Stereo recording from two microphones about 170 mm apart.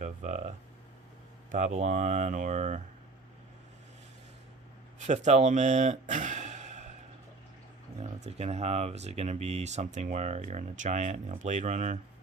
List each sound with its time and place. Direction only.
0.0 s a sound: 45° right (ahead or behind)
1.5 s speech: 45° right (ahead or behind)
4.9 s speech: 45° right (ahead or behind)
8.0 s speech: 40° right (ahead or behind)